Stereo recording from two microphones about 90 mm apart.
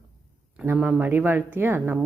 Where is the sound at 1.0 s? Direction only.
20° right (ahead or behind).